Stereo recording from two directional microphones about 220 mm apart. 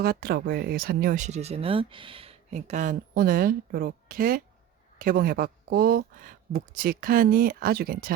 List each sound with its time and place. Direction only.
0.0 s speech: 45° right (ahead or behind)